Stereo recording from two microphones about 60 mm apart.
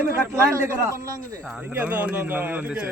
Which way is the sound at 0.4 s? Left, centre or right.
Right.